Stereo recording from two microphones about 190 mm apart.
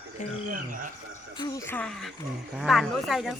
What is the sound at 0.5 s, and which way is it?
Speech, 45° right (ahead or behind).